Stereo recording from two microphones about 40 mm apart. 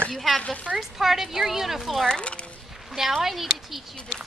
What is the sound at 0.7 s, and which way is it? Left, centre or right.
Speech, centre.